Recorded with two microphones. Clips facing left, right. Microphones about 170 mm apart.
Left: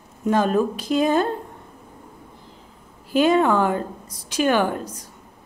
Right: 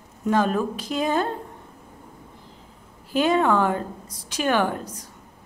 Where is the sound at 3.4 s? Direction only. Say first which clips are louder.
Left 2 dB; 15° left (ahead or behind).